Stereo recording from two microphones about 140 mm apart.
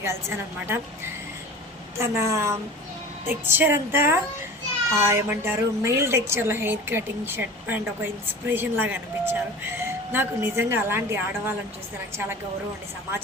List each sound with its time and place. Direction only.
0.0 s a woman's voice: 20° right (ahead or behind)
2.0 s a woman's voice: 20° right (ahead or behind)